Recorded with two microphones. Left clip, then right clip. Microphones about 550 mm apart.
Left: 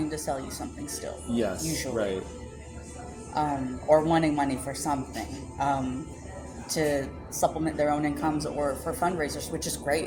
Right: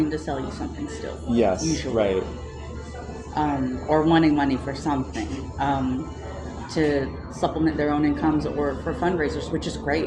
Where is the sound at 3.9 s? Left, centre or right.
Left.